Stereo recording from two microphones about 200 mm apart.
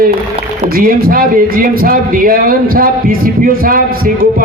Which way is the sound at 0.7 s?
45° right (ahead or behind).